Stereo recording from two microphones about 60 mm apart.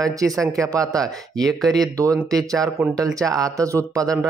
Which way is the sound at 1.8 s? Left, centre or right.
Right.